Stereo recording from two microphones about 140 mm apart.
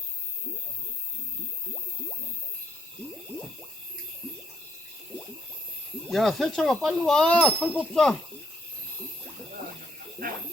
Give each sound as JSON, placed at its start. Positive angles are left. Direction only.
{"t": 6.1, "sound": "speech", "side_deg": 0}
{"t": 10.2, "sound": "snake", "side_deg": -90}